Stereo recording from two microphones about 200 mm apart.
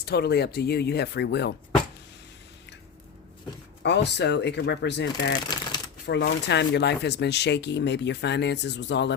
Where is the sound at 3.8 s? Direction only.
60° left (ahead or behind).